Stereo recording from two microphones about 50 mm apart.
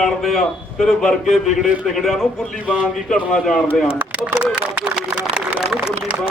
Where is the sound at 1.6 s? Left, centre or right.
Centre.